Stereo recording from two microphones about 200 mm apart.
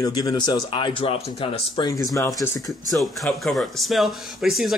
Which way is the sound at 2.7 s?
Centre (ahead or behind).